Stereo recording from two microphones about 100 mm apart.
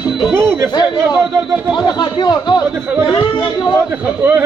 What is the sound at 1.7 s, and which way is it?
Speech, 45° left (ahead or behind).